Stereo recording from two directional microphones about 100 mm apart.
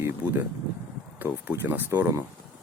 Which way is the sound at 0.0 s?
20° right (ahead or behind).